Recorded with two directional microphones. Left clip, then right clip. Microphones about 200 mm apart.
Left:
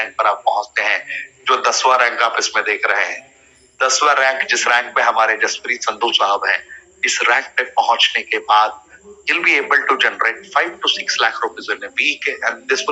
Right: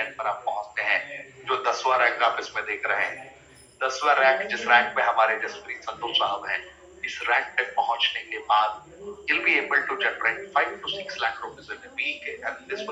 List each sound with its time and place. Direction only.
0.0 s a man's voice: 50° left (ahead or behind)